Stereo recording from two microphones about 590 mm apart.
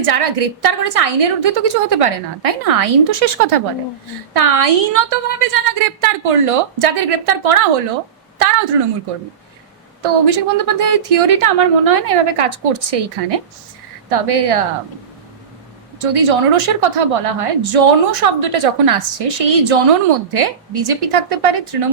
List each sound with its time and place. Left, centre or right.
0.0 s a woman's voice: right
8.7 s a woman's voice: right
10.0 s a woman's voice: right
16.0 s a woman's voice: right